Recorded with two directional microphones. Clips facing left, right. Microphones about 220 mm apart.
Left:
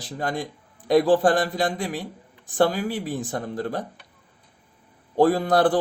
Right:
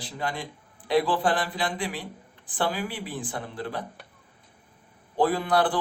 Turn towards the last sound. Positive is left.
turn(degrees=45)  # may be behind; listen again after turning